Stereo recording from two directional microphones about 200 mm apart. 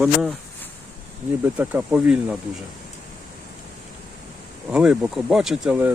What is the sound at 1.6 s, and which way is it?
Speech, 5° right (ahead or behind).